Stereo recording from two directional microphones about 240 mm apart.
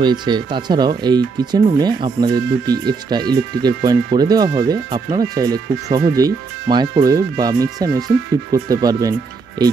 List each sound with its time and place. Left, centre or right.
0.0 s speech: centre